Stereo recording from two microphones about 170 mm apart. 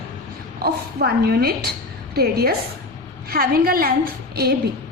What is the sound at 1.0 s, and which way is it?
A woman's voice, 65° right (ahead or behind).